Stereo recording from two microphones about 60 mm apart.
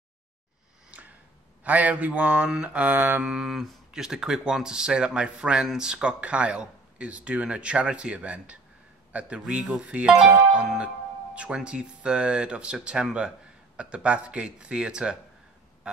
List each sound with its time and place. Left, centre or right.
0.9 s a sound: right
1.6 s speech: right
3.3 s speech: centre